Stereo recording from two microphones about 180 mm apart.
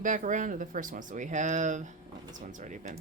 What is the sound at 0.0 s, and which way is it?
Speech, 45° right (ahead or behind).